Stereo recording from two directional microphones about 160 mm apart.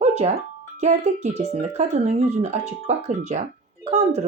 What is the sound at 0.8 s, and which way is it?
Speech, 45° right (ahead or behind).